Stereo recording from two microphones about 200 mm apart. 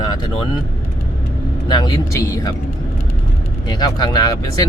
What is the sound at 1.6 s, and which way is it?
Speech, 20° left (ahead or behind).